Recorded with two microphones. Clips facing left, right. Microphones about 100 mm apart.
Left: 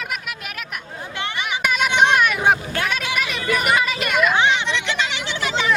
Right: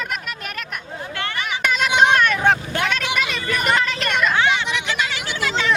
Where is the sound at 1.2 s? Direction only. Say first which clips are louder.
Even; 20° left (ahead or behind).